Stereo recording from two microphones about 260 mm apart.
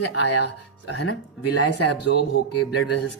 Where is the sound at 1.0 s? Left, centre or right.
Left.